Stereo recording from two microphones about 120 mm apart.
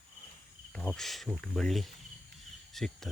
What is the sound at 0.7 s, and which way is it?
Speech, 5° left (ahead or behind).